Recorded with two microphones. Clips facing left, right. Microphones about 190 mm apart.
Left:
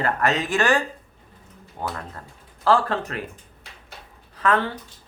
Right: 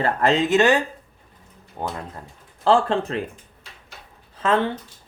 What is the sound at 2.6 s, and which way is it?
Speech, 25° right (ahead or behind).